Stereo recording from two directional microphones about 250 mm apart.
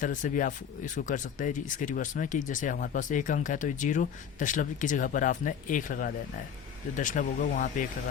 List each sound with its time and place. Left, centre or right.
0.0 s speech: left